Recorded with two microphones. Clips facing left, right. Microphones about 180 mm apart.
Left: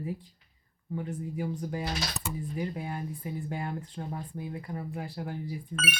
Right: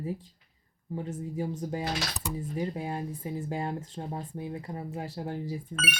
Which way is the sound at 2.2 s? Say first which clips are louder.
Right 2 dB; centre (ahead or behind).